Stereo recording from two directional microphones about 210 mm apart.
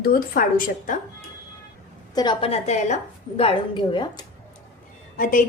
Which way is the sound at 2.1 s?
20° left (ahead or behind).